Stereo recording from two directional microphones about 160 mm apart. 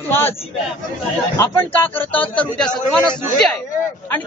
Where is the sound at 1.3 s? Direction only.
10° left (ahead or behind).